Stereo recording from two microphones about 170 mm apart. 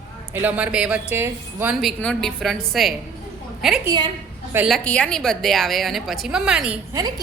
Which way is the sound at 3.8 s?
25° right (ahead or behind).